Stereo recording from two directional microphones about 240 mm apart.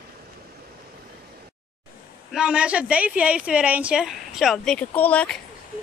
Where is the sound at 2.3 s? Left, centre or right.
Centre.